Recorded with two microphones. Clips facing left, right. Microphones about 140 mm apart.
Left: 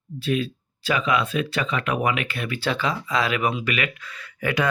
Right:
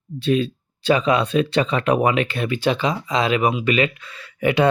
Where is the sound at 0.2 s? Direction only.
30° right (ahead or behind).